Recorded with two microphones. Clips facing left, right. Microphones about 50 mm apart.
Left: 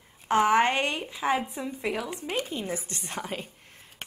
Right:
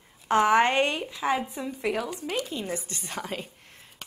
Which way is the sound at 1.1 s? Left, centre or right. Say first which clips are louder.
Even; left.